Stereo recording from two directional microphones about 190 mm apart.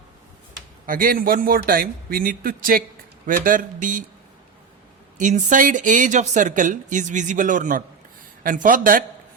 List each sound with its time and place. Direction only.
0.9 s a man's voice: 45° right (ahead or behind)
5.1 s a man's voice: 40° right (ahead or behind)